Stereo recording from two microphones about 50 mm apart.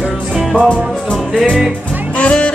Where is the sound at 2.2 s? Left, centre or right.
Left.